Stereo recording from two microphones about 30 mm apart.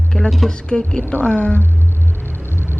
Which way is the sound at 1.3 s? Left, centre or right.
Left.